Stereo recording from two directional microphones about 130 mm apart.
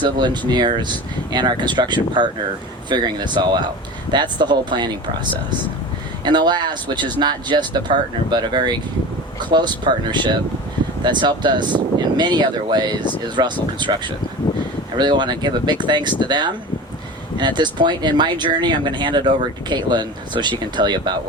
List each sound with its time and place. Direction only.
0.0 s speech: 35° right (ahead or behind)
6.2 s speech: 35° right (ahead or behind)